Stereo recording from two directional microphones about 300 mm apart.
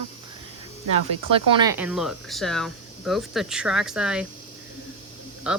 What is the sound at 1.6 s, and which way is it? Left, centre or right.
Speech, centre.